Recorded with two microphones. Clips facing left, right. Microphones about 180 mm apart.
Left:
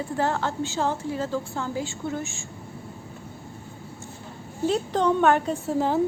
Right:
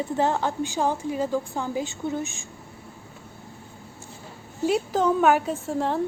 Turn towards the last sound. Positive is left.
turn(degrees=0)  # may be behind; listen again after turning